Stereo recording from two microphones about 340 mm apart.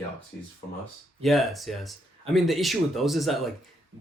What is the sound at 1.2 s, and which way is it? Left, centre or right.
Speech, centre.